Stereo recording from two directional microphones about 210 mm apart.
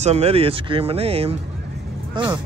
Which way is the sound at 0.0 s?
30° right (ahead or behind).